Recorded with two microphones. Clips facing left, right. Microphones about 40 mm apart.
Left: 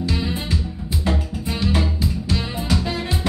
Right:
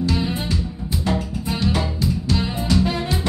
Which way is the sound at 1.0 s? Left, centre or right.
Centre.